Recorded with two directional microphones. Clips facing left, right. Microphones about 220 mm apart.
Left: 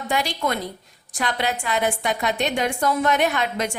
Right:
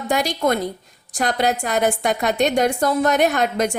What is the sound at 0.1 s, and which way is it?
A woman's voice, 40° right (ahead or behind).